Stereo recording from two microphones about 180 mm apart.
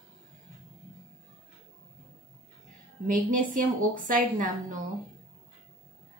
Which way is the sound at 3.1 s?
45° right (ahead or behind).